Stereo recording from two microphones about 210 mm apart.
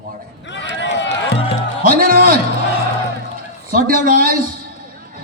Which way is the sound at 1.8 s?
45° right (ahead or behind).